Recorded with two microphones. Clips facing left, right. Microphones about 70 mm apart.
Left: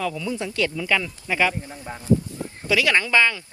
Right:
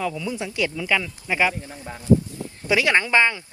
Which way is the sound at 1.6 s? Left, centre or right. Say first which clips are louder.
Right 2 dB; left.